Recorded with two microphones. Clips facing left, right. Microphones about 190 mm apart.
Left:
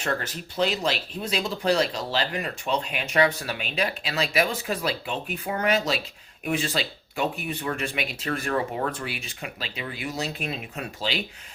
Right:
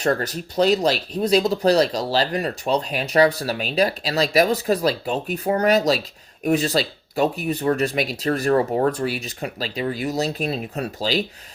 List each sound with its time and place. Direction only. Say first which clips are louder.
0.0 s speech: right 7 dB; 40° right (ahead or behind)